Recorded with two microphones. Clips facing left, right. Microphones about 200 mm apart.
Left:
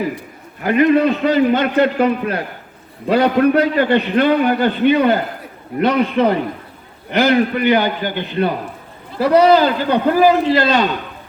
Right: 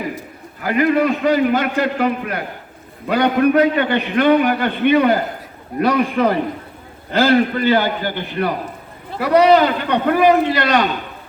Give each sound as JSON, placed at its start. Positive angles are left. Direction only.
{"t": 0.6, "sound": "a man's voice", "side_deg": 25}